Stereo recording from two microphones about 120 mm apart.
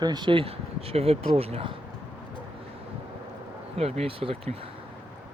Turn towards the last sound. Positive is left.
turn(degrees=-50)  # may be behind; listen again after turning